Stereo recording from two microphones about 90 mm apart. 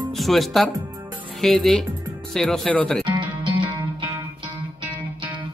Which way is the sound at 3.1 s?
65° right (ahead or behind).